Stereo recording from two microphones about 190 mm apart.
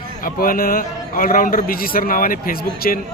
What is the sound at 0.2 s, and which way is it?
A man's voice, 50° left (ahead or behind).